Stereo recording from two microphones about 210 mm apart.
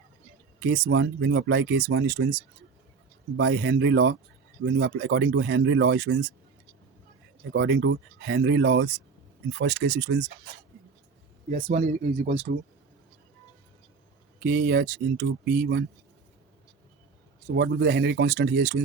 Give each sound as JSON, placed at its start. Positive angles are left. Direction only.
{"t": 0.6, "sound": "speech", "side_deg": -65}
{"t": 3.3, "sound": "speech", "side_deg": -60}
{"t": 7.5, "sound": "speech", "side_deg": -55}
{"t": 11.5, "sound": "speech", "side_deg": -30}
{"t": 14.3, "sound": "speech", "side_deg": -50}
{"t": 17.5, "sound": "speech", "side_deg": -55}